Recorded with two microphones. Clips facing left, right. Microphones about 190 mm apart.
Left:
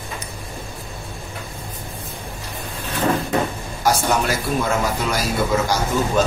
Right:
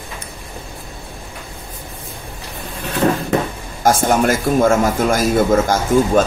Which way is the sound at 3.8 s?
50° right (ahead or behind).